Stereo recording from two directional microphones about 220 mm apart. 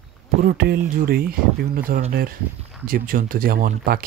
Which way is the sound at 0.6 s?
45° right (ahead or behind).